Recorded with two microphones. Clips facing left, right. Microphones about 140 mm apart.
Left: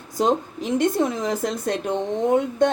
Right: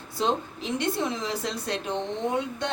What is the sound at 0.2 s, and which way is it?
Speech, 45° left (ahead or behind).